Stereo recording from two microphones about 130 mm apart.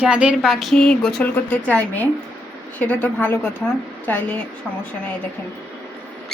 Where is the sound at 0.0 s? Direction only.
10° right (ahead or behind); by 4.4 s 15° left (ahead or behind).